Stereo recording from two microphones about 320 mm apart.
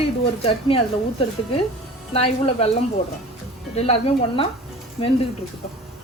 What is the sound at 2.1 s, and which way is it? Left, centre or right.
Speech, centre.